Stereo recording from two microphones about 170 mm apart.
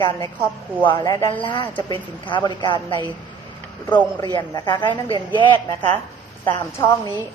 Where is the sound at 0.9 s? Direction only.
25° left (ahead or behind).